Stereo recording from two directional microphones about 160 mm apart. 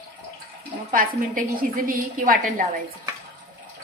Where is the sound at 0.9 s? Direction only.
60° right (ahead or behind).